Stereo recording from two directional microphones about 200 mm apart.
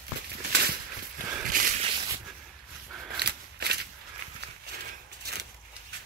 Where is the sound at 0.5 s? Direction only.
55° right (ahead or behind).